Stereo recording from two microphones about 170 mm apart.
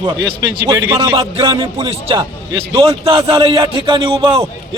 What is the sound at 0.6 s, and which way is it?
A man's voice, 20° right (ahead or behind).